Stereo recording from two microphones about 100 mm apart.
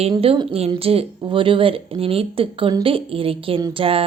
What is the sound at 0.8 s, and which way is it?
Speech, 75° right (ahead or behind).